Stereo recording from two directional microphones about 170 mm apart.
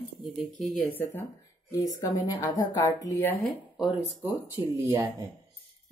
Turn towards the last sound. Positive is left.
turn(degrees=-20)  # may be behind; listen again after turning